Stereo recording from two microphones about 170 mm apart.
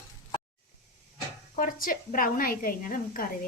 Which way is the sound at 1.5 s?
55° left (ahead or behind).